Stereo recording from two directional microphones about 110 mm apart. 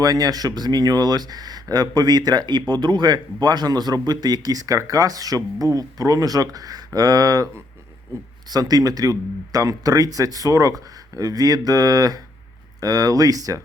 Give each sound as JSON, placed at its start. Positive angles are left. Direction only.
{"t": 0.0, "sound": "speech", "side_deg": -35}